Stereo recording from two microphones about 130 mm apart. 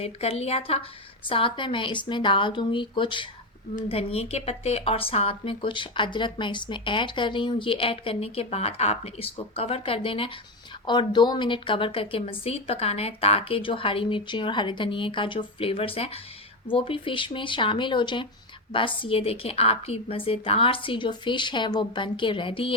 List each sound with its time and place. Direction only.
0.0 s a woman's voice: 50° left (ahead or behind)
3.8 s a woman's voice: 50° left (ahead or behind)